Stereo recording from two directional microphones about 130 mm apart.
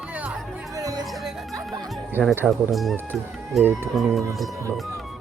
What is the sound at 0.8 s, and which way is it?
Music, 25° right (ahead or behind).